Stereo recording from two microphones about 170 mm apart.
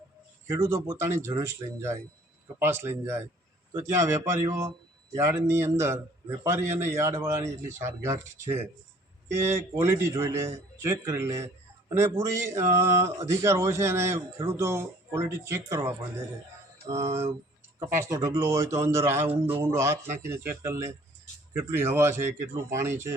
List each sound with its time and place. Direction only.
0.4 s speech: 20° right (ahead or behind)